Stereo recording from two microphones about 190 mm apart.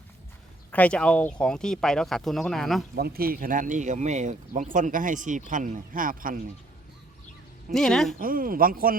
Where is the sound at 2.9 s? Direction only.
50° right (ahead or behind).